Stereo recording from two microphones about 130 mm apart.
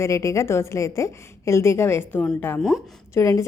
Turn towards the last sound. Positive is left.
turn(degrees=25)  # may be behind; listen again after turning